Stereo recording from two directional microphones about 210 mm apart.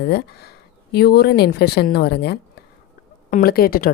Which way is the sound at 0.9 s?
50° left (ahead or behind).